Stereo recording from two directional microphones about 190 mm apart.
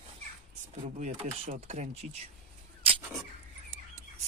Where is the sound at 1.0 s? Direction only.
40° right (ahead or behind).